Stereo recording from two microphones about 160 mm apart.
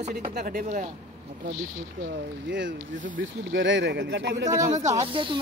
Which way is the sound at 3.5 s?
90° right.